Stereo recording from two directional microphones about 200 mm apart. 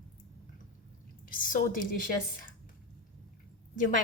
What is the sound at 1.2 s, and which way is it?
Speech, 45° left (ahead or behind).